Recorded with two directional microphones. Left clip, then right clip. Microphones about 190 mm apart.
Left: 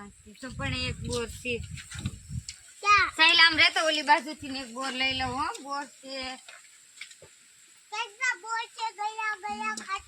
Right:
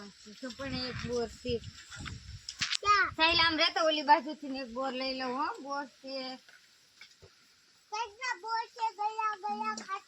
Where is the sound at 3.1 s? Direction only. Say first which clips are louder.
Left 7 dB; 5° left (ahead or behind).